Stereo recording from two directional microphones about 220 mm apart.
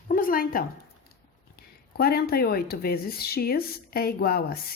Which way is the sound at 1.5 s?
45° left (ahead or behind).